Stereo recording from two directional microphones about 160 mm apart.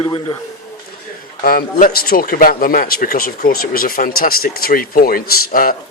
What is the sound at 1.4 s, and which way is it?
A man's voice, 65° left (ahead or behind).